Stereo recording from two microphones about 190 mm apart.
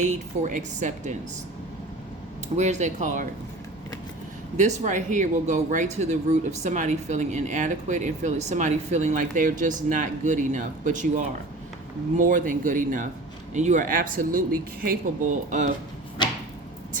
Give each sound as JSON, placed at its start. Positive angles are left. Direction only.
{"t": 0.0, "sound": "speech", "side_deg": -40}
{"t": 2.6, "sound": "speech", "side_deg": -35}
{"t": 4.5, "sound": "speech", "side_deg": -40}
{"t": 12.1, "sound": "speech", "side_deg": -45}